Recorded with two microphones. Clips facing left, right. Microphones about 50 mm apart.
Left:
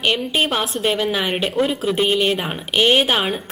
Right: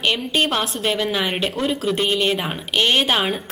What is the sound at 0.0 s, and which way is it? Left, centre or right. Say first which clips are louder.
A woman's voice: left 1 dB; centre.